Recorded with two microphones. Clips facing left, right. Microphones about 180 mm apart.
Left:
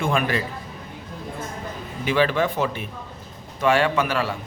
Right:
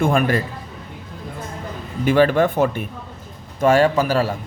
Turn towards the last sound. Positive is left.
turn(degrees=-40)  # may be behind; listen again after turning